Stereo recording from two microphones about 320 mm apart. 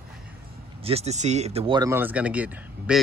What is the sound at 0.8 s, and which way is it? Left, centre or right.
Speech, centre.